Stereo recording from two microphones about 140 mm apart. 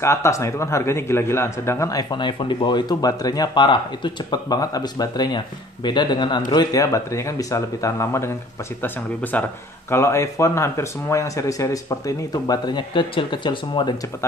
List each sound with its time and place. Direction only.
0.0 s a man's voice: 20° left (ahead or behind)
9.3 s a man's voice: 10° left (ahead or behind); by 13.9 s 35° left (ahead or behind)